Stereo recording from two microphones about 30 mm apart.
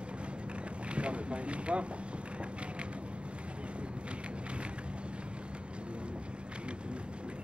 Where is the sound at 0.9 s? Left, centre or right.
Right.